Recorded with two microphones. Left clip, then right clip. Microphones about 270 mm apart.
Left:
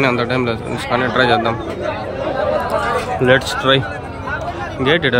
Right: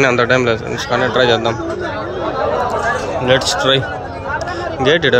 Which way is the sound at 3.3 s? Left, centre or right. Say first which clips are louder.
Right 1 dB; centre.